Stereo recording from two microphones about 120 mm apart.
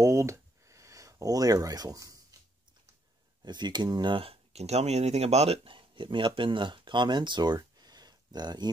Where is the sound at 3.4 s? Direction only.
40° right (ahead or behind).